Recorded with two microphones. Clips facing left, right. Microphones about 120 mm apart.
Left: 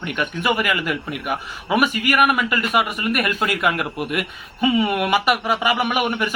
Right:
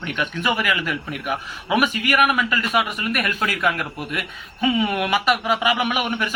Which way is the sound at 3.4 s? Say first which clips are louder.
Left 2 dB; 20° left (ahead or behind).